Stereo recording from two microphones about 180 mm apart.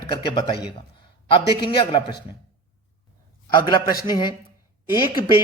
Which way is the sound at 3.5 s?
25° left (ahead or behind).